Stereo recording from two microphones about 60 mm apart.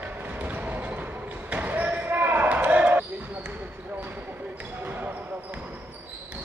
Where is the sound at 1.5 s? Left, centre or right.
Right.